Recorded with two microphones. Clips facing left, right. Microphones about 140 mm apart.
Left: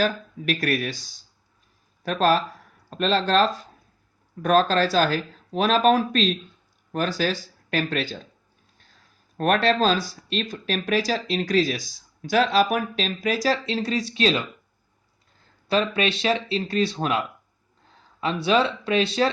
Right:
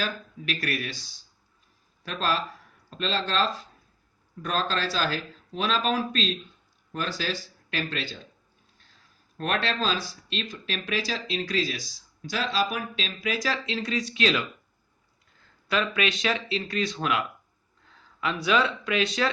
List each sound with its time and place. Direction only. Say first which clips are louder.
0.0 s speech: left 8 dB; 45° left (ahead or behind)
9.4 s speech: left 8 dB; 45° left (ahead or behind)
15.7 s speech: left 4 dB; 30° left (ahead or behind)